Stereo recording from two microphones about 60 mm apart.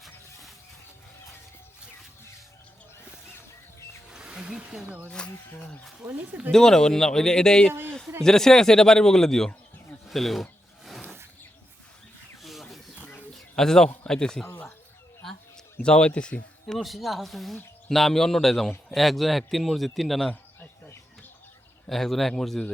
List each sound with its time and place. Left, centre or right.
0.0 s a sound: centre
4.1 s a sound: centre
5.0 s speech: centre
6.1 s speech: right
6.5 s speech: centre
10.1 s a sound: centre
12.4 s rub: centre
13.3 s bird: centre
14.1 s a man's voice: centre
16.6 s speech: centre
20.3 s bird: left
21.8 s speech: centre